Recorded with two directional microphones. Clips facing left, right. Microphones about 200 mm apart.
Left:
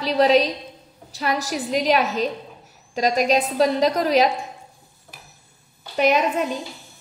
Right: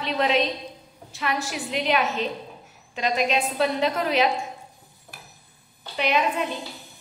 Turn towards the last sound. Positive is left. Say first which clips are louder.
# left 4 dB
turn(degrees=40)  # may be behind; listen again after turning